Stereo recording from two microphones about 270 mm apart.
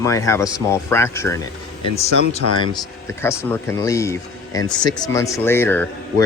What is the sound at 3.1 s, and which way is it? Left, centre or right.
Speech, centre.